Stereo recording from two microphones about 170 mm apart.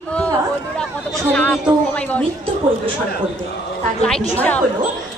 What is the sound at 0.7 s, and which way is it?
Speech, 5° left (ahead or behind).